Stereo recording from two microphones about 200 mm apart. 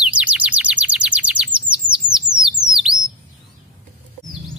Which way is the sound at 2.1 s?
5° right (ahead or behind).